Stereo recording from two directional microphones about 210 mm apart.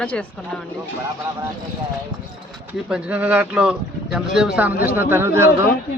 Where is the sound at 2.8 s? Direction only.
5° right (ahead or behind).